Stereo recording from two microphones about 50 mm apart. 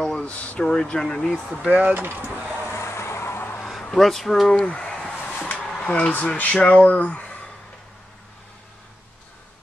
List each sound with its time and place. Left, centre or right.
0.2 s speech: left
0.7 s speech: centre
1.7 s speech: right
2.0 s speech: right
2.6 s vehicle: left
3.9 s speech: centre
4.6 s a sound: centre
5.4 s speech: left